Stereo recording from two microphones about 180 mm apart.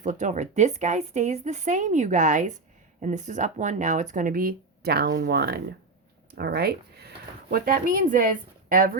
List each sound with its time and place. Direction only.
0.0 s a woman's voice: 45° right (ahead or behind)